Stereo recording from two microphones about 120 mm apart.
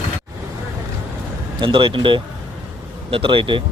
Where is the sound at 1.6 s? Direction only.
45° right (ahead or behind).